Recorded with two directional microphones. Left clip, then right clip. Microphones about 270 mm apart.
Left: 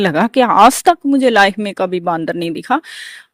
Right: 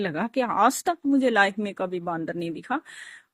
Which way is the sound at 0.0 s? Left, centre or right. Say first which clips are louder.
Left 14 dB; left.